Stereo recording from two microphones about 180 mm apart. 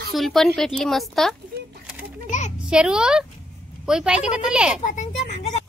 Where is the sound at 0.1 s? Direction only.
Centre (ahead or behind).